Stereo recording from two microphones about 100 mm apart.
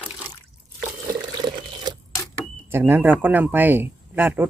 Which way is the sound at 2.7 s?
20° right (ahead or behind).